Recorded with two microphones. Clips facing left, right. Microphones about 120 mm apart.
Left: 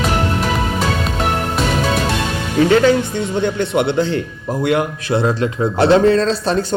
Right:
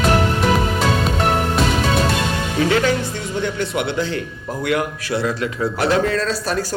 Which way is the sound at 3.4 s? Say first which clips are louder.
Left 5 dB; 25° left (ahead or behind).